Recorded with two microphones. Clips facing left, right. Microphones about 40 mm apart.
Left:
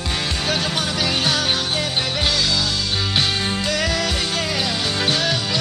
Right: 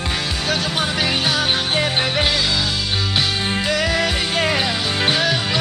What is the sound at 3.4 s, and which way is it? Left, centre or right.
Music, centre.